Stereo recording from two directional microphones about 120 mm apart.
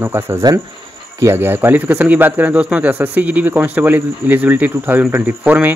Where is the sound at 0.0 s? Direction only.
20° right (ahead or behind).